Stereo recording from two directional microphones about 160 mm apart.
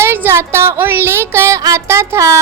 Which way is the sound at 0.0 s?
15° right (ahead or behind).